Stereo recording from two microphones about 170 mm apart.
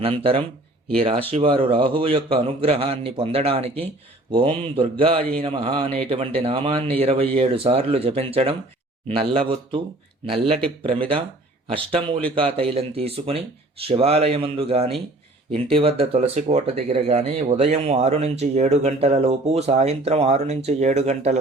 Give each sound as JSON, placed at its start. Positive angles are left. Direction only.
{"t": 0.0, "sound": "speech", "side_deg": -30}
{"t": 11.7, "sound": "speech", "side_deg": -30}